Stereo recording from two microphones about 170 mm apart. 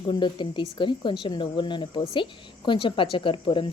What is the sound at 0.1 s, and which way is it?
A woman's voice, 30° left (ahead or behind).